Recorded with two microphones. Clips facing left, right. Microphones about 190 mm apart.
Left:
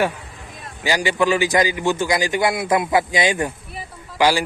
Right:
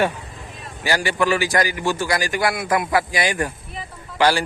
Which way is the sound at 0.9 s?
15° left (ahead or behind).